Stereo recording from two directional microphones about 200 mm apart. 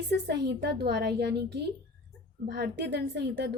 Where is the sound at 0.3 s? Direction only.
55° right (ahead or behind).